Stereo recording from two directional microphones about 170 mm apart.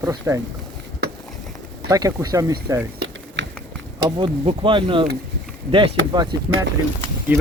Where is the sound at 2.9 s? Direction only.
75° right (ahead or behind).